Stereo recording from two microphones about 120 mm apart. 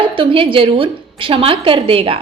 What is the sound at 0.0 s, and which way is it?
A woman's voice, 45° right (ahead or behind).